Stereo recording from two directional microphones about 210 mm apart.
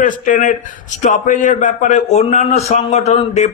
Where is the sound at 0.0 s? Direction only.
40° left (ahead or behind).